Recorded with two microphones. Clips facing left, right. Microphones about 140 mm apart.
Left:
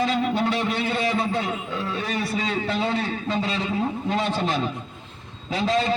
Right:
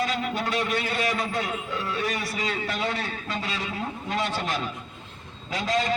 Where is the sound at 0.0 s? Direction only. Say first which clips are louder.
Left 5 dB; 25° left (ahead or behind).